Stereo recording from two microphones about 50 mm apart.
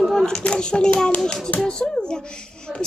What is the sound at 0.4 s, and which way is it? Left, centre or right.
A child's voice, centre.